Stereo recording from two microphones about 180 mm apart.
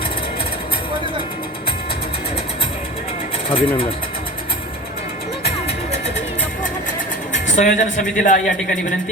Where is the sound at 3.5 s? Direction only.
30° left (ahead or behind).